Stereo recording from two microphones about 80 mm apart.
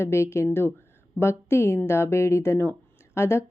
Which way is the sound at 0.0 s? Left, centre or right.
Left.